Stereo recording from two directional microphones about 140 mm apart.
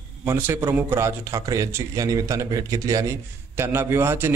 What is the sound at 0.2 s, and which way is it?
A man's voice, 15° right (ahead or behind).